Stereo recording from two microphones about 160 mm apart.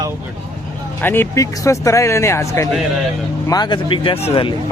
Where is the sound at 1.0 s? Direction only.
15° left (ahead or behind); by 4.2 s 35° left (ahead or behind).